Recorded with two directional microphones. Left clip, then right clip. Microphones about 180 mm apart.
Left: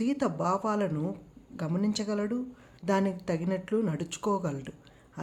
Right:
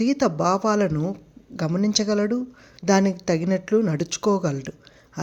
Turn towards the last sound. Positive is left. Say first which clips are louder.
# right 8 dB
turn(degrees=-30)  # may be behind; listen again after turning